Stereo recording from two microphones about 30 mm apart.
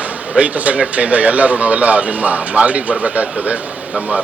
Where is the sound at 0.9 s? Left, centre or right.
Right.